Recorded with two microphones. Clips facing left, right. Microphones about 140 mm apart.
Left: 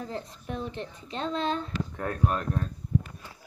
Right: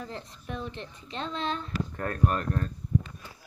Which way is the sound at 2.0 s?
5° left (ahead or behind).